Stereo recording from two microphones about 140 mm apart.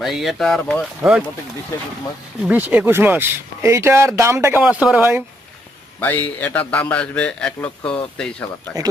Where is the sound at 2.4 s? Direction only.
10° right (ahead or behind).